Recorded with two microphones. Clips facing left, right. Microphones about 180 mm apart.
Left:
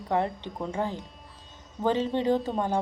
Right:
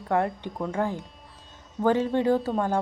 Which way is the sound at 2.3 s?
10° right (ahead or behind).